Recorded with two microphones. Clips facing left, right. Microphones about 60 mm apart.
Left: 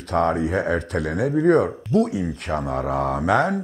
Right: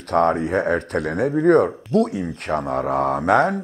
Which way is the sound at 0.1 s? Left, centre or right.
Right.